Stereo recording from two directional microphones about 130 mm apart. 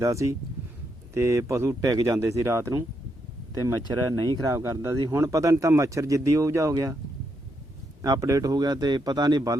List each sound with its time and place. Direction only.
0.0 s speech: 25° right (ahead or behind)
8.0 s speech: 25° right (ahead or behind)